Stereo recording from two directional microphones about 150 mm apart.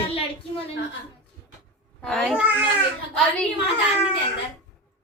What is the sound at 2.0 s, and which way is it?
Speech, 5° left (ahead or behind).